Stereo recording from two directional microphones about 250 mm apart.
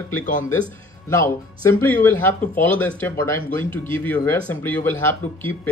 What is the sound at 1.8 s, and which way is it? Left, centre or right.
Speech, centre.